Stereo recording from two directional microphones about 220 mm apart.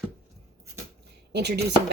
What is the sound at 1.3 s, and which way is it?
Speech, 50° right (ahead or behind).